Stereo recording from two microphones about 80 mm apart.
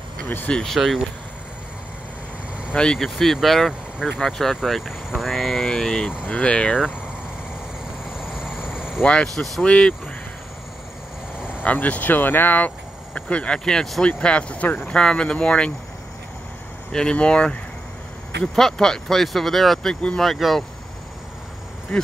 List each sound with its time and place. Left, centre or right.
0.5 s speech: centre
0.7 s speech: centre
2.7 s speech: centre
8.0 s vehicle: centre
9.0 s speech: centre
11.6 s speech: centre
16.9 s speech: centre
21.9 s speech: centre